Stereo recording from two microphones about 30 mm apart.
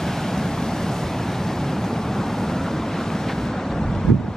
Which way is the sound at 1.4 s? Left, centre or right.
Centre.